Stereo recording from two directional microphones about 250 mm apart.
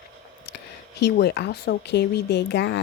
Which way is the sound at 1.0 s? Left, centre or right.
Left.